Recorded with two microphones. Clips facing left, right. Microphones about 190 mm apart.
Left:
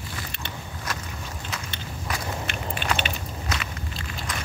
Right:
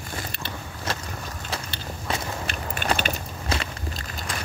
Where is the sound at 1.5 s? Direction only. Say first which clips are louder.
Right 5 dB; 30° right (ahead or behind).